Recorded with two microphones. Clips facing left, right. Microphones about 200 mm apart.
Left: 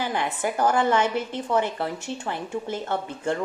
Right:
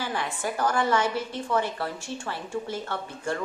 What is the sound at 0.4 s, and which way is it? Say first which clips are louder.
A woman's voice: left 4 dB; 20° left (ahead or behind).